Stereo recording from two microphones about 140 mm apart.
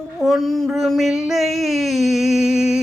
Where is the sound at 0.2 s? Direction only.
Centre (ahead or behind).